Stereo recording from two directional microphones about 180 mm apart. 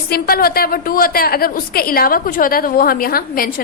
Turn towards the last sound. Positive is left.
turn(degrees=55)  # may be behind; listen again after turning